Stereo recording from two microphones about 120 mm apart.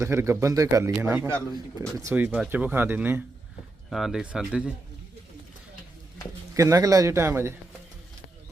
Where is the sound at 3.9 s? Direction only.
5° right (ahead or behind).